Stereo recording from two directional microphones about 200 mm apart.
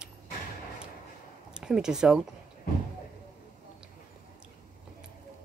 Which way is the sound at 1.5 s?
5° right (ahead or behind).